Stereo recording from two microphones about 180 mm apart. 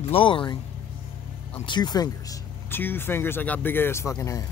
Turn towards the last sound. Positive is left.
turn(degrees=15)  # may be behind; listen again after turning